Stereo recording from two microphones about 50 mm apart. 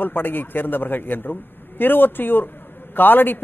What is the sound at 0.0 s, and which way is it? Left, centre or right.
A man's voice, left.